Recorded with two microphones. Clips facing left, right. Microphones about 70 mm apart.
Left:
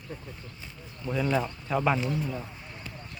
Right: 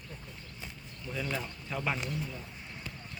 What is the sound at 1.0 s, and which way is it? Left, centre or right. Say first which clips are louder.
Speech: left 9 dB; left.